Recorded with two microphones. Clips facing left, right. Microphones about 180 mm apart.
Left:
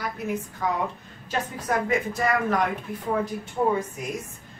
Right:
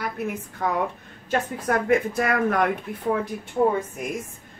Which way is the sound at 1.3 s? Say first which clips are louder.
Right 3 dB; 60° right (ahead or behind).